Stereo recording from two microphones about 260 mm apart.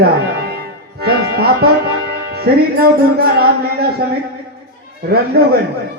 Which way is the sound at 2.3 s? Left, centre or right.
Right.